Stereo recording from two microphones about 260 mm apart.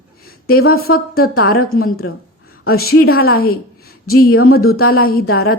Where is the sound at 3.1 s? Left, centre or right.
Left.